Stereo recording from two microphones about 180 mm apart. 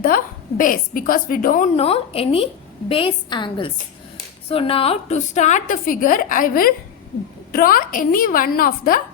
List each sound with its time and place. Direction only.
0.0 s a woman's voice: 50° left (ahead or behind)